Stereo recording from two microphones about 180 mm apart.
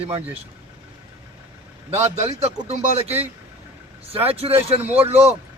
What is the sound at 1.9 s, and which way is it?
A man's voice, 40° right (ahead or behind).